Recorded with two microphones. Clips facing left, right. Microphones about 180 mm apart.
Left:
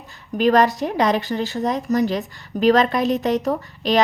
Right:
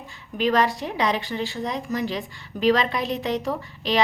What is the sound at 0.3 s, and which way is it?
A woman's voice, 45° left (ahead or behind).